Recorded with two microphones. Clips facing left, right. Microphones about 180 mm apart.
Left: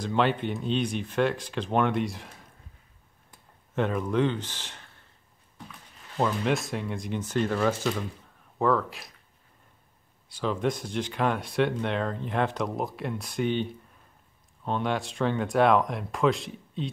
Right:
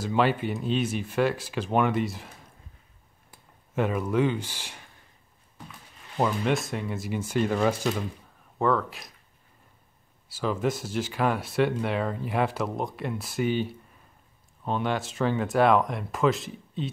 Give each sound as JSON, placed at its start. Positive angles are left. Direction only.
{"t": 0.0, "sound": "speech", "side_deg": -5}
{"t": 3.3, "sound": "a sound", "side_deg": -5}
{"t": 6.4, "sound": "speech", "side_deg": 0}
{"t": 8.5, "sound": "speech", "side_deg": 0}
{"t": 10.3, "sound": "speech", "side_deg": -5}